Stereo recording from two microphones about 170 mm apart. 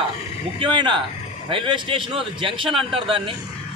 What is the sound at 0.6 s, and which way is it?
A man's voice, 30° right (ahead or behind).